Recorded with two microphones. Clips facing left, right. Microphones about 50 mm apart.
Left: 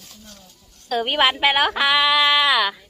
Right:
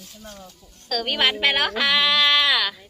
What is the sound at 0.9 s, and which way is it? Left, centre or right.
A woman's voice, left.